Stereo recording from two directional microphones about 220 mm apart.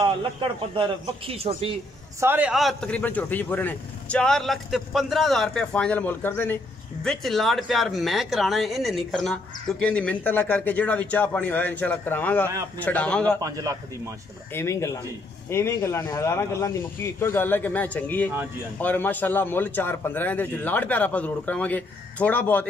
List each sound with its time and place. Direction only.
0.0 s a man's voice: 25° right (ahead or behind)
2.1 s a man's voice: 10° right (ahead or behind)
13.4 s a man's voice: 15° right (ahead or behind)
14.5 s a man's voice: 15° left (ahead or behind)